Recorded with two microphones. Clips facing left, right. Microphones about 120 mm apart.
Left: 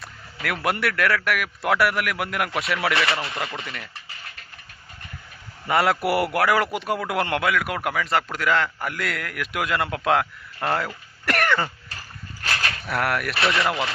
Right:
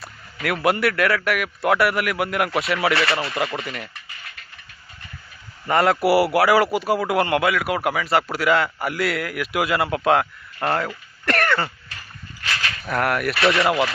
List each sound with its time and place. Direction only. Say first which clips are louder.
0.4 s a man's voice: right 4 dB; centre (ahead or behind)
5.6 s a man's voice: right 3 dB; 5° left (ahead or behind)
12.4 s a sound: even; 40° left (ahead or behind)
12.8 s a man's voice: right 4 dB; centre (ahead or behind)
13.4 s speech: right 4 dB; 25° right (ahead or behind)
13.7 s a man's voice: right 5 dB; 5° right (ahead or behind)